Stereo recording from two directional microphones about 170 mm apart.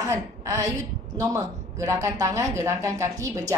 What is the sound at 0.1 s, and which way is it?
A woman's voice, 20° right (ahead or behind).